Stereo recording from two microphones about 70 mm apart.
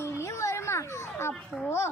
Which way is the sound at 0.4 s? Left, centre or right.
Left.